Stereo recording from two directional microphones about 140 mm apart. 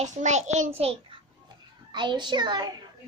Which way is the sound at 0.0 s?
55° right (ahead or behind).